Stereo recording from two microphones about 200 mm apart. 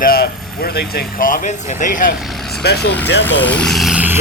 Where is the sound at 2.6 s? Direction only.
55° left (ahead or behind).